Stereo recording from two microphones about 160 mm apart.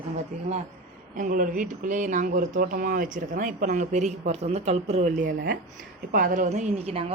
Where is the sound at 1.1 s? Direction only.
60° right (ahead or behind).